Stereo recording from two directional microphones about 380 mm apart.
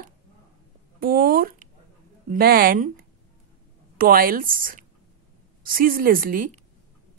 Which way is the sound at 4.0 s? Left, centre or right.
Right.